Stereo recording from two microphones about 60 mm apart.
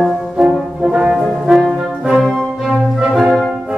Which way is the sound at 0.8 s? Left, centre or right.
Centre.